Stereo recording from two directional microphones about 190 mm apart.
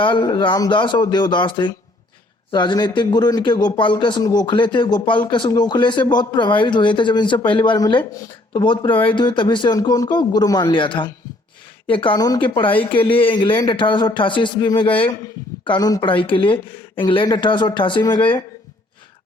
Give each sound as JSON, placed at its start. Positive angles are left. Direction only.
{"t": 0.0, "sound": "speech", "side_deg": 25}